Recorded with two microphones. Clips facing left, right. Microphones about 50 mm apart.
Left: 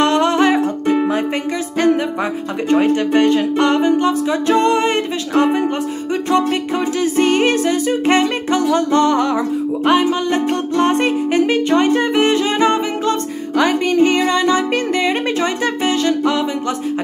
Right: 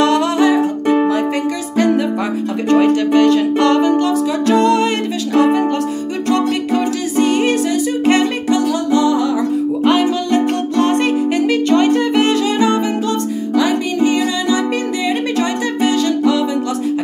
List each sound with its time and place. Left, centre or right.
0.0 s music: left
2.7 s music: left
7.2 s music: left
9.8 s music: left